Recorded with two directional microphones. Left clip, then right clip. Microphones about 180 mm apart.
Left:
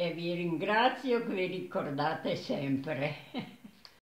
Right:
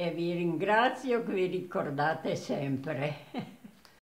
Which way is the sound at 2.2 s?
50° right (ahead or behind).